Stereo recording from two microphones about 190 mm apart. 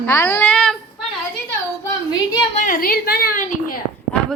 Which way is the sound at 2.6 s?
45° left (ahead or behind).